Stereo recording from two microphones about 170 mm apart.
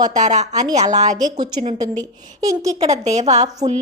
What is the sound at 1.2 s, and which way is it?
Speech, 25° right (ahead or behind).